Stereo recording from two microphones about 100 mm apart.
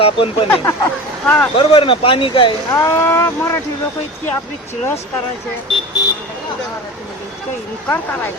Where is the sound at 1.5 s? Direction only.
60° left (ahead or behind).